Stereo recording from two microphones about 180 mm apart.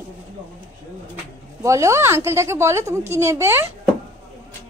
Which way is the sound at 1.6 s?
15° right (ahead or behind).